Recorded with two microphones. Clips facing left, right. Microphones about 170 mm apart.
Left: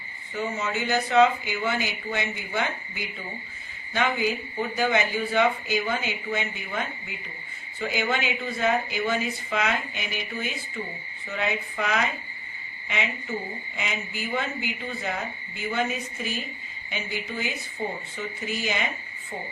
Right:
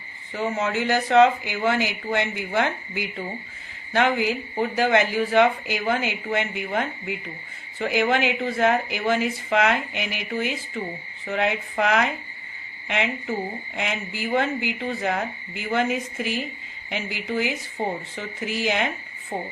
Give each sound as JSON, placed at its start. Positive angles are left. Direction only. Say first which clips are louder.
{"t": 0.3, "sound": "a woman's voice", "louder": "right 4 dB", "side_deg": -90}
{"t": 6.3, "sound": "a woman's voice", "louder": "right 7 dB", "side_deg": -75}
{"t": 11.3, "sound": "a woman's voice", "louder": "right 5 dB", "side_deg": -80}
{"t": 17.8, "sound": "speech", "louder": "right 4 dB", "side_deg": -80}
{"t": 18.2, "sound": "speech", "louder": "right 2 dB", "side_deg": -90}